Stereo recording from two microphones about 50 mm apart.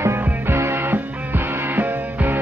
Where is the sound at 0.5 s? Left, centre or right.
Right.